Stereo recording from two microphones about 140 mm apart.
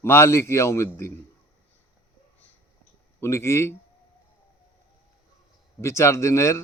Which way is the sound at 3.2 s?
20° left (ahead or behind).